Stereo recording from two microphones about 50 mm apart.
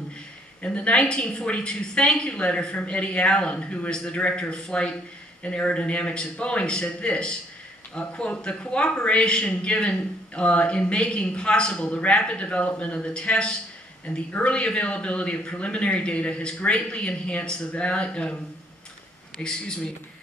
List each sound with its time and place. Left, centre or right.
0.6 s a man's voice: left
19.4 s speech: centre